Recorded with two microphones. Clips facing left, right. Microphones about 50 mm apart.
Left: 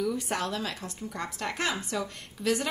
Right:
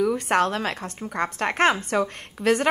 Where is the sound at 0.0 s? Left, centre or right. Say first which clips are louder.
Right 9 dB; right.